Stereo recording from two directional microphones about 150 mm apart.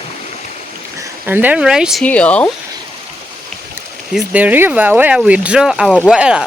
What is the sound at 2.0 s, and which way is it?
Speech, 10° left (ahead or behind).